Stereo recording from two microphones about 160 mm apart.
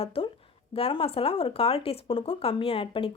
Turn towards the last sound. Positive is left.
turn(degrees=35)  # may be behind; listen again after turning